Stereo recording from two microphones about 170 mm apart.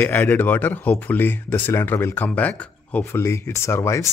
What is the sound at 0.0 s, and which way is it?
Speech, 10° left (ahead or behind).